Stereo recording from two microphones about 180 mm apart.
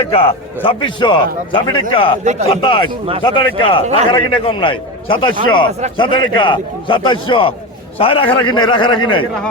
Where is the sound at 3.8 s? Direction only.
40° right (ahead or behind).